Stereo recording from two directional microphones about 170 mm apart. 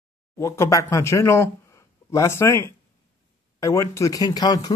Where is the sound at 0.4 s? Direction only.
20° left (ahead or behind).